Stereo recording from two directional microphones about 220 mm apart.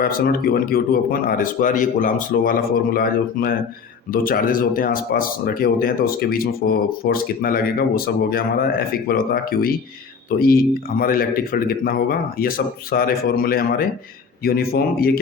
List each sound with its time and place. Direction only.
0.0 s speech: 40° left (ahead or behind)